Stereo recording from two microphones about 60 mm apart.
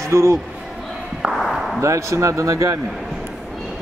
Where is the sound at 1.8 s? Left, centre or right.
Right.